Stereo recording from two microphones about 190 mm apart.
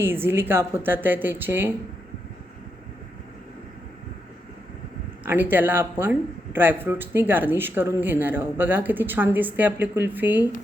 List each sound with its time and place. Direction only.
0.0 s speech: 10° right (ahead or behind)
5.2 s speech: 10° right (ahead or behind)